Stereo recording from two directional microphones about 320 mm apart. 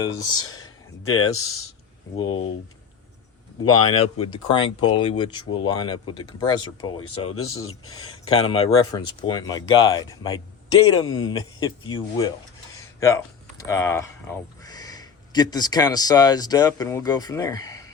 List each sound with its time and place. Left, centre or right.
0.0 s speech: centre
0.4 s speech: left
2.1 s speech: centre
3.7 s speech: centre
7.3 s speech: left
8.3 s speech: centre
10.9 s speech: left
11.2 s speech: centre
12.7 s a sound: centre
13.7 s speech: centre